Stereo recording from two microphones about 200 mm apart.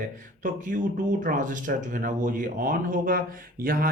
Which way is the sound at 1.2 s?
40° right (ahead or behind).